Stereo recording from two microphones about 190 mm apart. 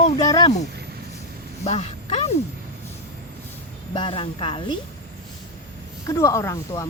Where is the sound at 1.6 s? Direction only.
35° left (ahead or behind).